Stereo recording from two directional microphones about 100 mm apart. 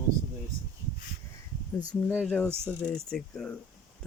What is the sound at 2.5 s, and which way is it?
Speech, 25° right (ahead or behind).